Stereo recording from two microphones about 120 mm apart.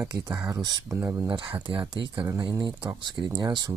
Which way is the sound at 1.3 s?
45° right (ahead or behind).